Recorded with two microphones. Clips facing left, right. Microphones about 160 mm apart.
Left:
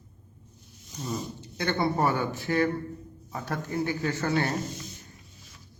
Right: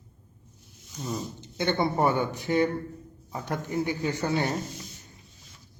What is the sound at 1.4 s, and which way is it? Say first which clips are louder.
A man's voice: right 3 dB; 20° right (ahead or behind).